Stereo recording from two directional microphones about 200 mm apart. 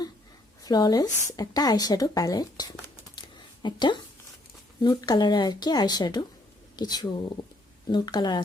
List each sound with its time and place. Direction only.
0.6 s speech: 20° left (ahead or behind)